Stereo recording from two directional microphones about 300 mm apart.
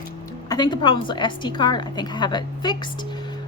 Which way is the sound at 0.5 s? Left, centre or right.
Centre.